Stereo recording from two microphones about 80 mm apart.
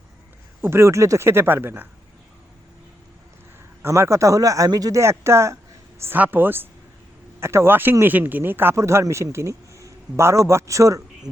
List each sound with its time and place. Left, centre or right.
0.6 s speech: right
3.8 s speech: right
4.9 s speech: right
6.1 s speech: right
8.7 s a man's voice: right